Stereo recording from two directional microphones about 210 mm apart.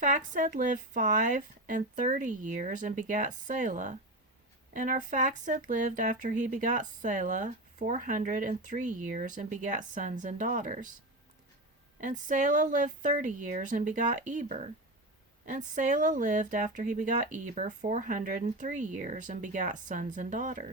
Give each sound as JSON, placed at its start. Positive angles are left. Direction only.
{"t": 0.0, "sound": "speech", "side_deg": -40}
{"t": 11.9, "sound": "speech", "side_deg": -35}